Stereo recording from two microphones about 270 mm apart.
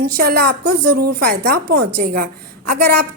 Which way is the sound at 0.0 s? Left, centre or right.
Right.